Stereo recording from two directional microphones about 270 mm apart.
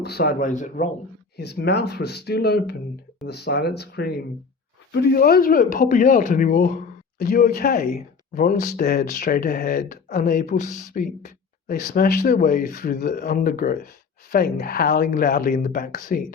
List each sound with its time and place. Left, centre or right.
0.0 s speech: left